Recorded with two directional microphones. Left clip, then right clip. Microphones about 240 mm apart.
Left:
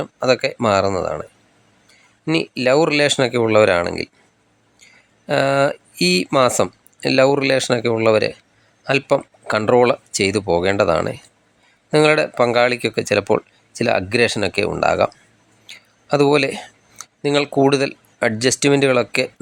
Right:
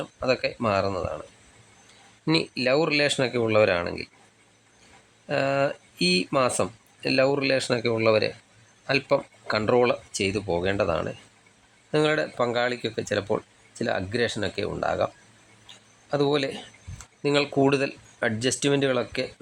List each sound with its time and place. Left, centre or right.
0.0 s speech: centre
5.2 s speech: centre